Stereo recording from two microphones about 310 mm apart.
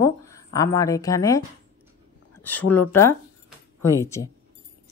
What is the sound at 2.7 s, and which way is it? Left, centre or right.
Speech, centre.